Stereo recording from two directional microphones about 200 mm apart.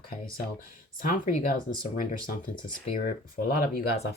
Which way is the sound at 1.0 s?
45° left (ahead or behind).